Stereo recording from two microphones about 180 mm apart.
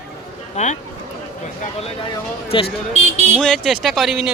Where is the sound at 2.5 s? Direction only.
30° left (ahead or behind).